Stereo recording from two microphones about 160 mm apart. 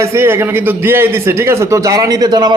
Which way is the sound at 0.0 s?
15° right (ahead or behind).